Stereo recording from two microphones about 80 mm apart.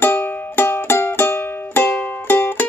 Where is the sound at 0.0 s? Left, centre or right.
Left.